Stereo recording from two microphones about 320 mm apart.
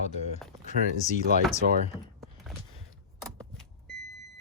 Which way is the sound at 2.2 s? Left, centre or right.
Centre.